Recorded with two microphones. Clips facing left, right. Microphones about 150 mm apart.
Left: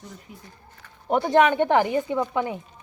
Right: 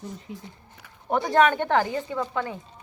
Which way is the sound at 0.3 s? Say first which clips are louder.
Right 6 dB; 20° right (ahead or behind).